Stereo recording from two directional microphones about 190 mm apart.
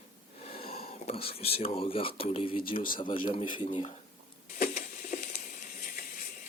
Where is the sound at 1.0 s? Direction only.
30° left (ahead or behind).